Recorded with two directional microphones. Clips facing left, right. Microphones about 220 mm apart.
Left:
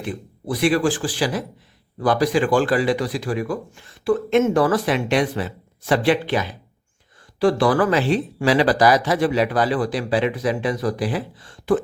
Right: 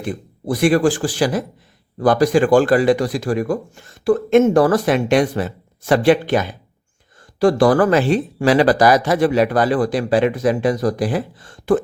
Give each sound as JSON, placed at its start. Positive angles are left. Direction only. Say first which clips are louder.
{"t": 0.0, "sound": "speech", "louder": "right 3 dB", "side_deg": -45}